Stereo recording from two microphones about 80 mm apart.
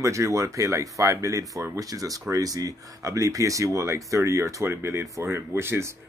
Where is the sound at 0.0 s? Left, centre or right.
Right.